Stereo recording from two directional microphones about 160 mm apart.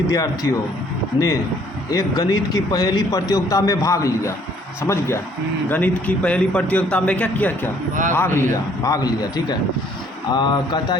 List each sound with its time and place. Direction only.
0.1 s speech: 20° left (ahead or behind)
1.9 s a man's voice: 20° left (ahead or behind)